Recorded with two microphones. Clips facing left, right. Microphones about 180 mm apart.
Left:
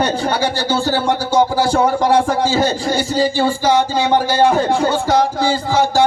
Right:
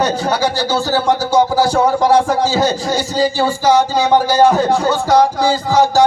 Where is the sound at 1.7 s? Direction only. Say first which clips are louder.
Right 1 dB; 55° left (ahead or behind).